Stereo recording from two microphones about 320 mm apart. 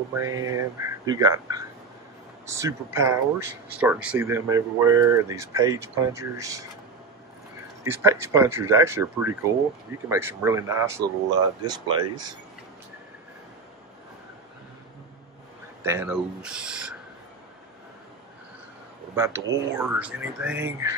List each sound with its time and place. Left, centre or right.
0.1 s speech: centre
7.8 s speech: centre
15.8 s speech: centre
19.1 s speech: centre